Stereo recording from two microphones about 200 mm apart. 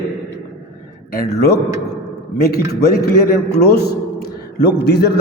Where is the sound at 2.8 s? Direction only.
50° left (ahead or behind).